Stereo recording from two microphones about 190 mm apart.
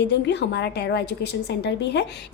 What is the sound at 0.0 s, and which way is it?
A woman's voice, 65° left (ahead or behind).